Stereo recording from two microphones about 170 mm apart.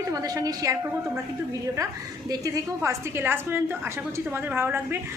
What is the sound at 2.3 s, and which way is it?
A woman's voice, 20° right (ahead or behind).